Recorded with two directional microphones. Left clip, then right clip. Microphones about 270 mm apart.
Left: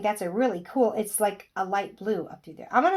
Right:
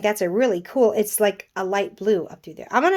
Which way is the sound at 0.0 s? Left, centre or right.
Right.